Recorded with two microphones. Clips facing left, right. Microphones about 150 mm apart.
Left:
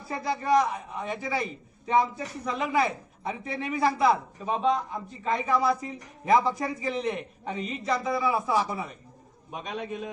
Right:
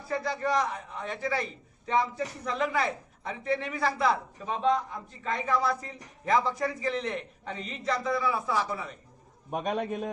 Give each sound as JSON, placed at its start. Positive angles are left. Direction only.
{"t": 0.1, "sound": "a man's voice", "side_deg": 10}
{"t": 9.5, "sound": "a man's voice", "side_deg": -50}